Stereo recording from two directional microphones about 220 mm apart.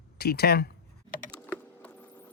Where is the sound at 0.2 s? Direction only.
45° left (ahead or behind).